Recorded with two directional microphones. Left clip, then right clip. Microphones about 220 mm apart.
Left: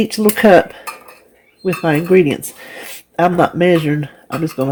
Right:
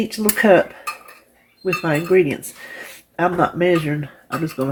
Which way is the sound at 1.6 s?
40° left (ahead or behind).